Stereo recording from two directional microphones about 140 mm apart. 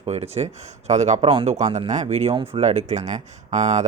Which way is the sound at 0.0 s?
50° right (ahead or behind).